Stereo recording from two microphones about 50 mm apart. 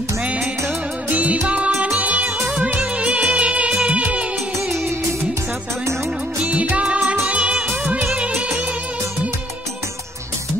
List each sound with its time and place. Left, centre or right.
1.1 s music of bollywood: right
2.0 s music: right
2.5 s music of bollywood: right
6.4 s music: right
8.2 s music of bollywood: right